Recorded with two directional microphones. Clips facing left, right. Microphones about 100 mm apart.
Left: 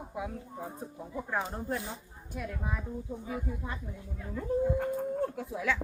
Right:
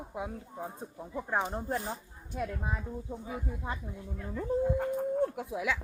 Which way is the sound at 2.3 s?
20° right (ahead or behind).